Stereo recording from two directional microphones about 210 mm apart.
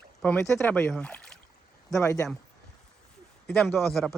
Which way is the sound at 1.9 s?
15° left (ahead or behind).